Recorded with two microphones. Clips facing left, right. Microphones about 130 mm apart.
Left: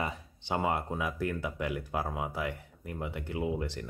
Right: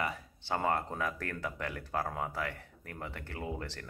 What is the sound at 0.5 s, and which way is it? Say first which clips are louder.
Speech: left 1 dB; 10° left (ahead or behind).